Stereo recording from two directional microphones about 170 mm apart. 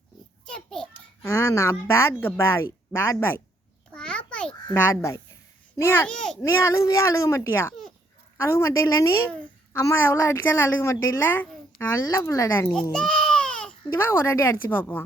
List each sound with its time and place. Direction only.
0.4 s a sound: 5° left (ahead or behind)
1.3 s a woman's voice: 15° left (ahead or behind)
3.9 s babbling: 5° left (ahead or behind)
6.4 s a woman's voice: 15° left (ahead or behind)
12.9 s speech: 5° left (ahead or behind)